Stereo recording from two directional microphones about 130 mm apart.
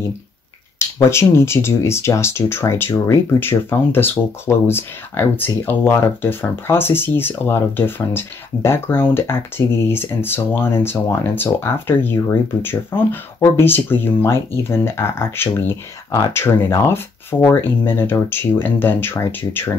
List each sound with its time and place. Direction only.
1.1 s speech: 20° left (ahead or behind)